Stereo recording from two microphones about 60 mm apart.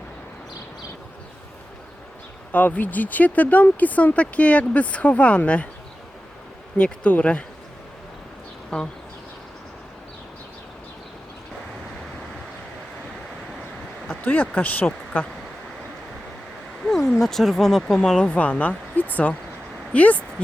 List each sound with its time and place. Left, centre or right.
2.5 s speech: left
6.7 s speech: centre
8.7 s speech: centre
14.1 s speech: left
16.8 s speech: centre
18.3 s speech: left